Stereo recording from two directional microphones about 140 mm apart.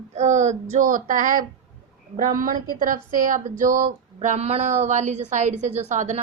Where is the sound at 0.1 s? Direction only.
55° right (ahead or behind).